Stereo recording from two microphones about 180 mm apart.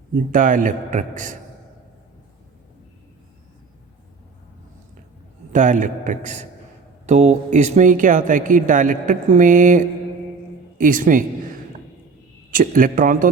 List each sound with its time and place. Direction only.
0.3 s speech: 50° right (ahead or behind)
5.5 s speech: 45° right (ahead or behind)
12.5 s speech: 50° right (ahead or behind)